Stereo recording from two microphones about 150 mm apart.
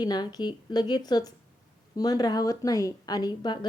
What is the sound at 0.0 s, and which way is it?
A woman's voice, 30° left (ahead or behind).